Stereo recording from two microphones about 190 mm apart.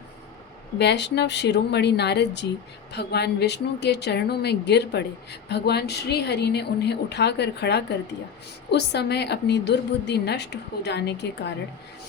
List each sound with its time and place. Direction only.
0.8 s a woman's voice: 65° left (ahead or behind)